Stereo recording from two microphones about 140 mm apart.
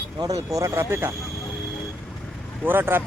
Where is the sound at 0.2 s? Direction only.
25° right (ahead or behind).